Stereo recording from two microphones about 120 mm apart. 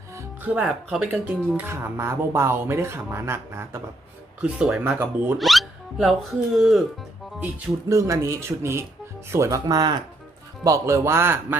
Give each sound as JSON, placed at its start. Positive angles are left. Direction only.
{"t": 0.4, "sound": "speech", "side_deg": -10}
{"t": 4.4, "sound": "speech", "side_deg": -10}
{"t": 5.4, "sound": "music", "side_deg": 0}
{"t": 6.6, "sound": "speech", "side_deg": 0}
{"t": 7.9, "sound": "speech", "side_deg": -25}